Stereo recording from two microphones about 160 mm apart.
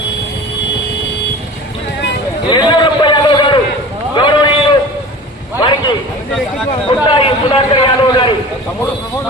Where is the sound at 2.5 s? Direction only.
30° left (ahead or behind).